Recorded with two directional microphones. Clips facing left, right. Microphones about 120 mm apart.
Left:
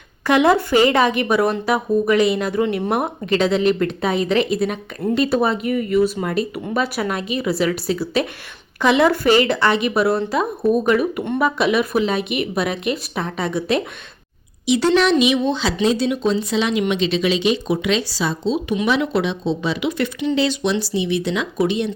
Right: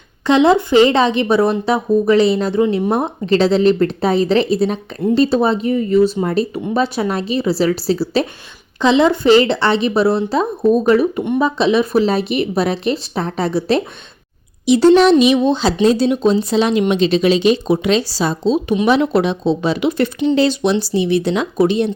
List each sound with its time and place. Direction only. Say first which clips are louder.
0.3 s speech: right 3 dB; 25° right (ahead or behind)